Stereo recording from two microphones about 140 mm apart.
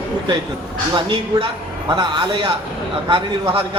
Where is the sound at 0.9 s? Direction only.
40° right (ahead or behind).